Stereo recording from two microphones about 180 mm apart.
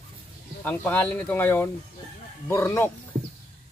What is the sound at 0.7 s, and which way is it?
Speech, 10° left (ahead or behind).